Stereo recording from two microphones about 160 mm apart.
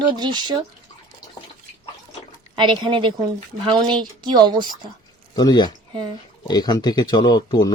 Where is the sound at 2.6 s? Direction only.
30° right (ahead or behind).